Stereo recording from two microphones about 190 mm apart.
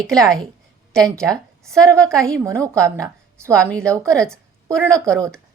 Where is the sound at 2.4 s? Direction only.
15° right (ahead or behind).